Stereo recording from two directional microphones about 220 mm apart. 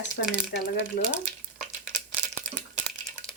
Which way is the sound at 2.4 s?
5° right (ahead or behind).